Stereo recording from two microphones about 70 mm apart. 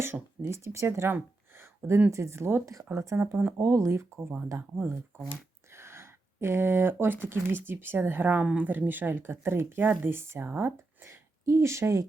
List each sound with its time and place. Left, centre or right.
0.0 s speech: right
3.2 s a woman's voice: right